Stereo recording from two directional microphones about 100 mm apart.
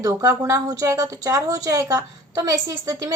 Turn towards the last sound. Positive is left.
turn(degrees=-35)  # may be behind; listen again after turning